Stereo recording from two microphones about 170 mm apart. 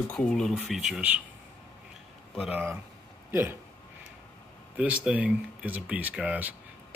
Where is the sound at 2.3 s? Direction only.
5° right (ahead or behind).